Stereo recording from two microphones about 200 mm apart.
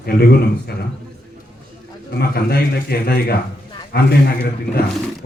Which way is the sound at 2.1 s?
50° left (ahead or behind).